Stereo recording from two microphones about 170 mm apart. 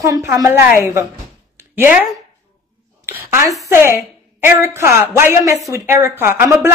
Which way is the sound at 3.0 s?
15° right (ahead or behind).